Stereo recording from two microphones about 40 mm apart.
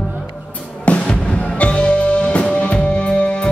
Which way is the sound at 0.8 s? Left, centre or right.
Left.